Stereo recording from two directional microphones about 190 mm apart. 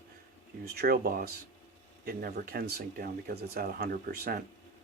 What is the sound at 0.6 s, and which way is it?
Speech, 55° right (ahead or behind).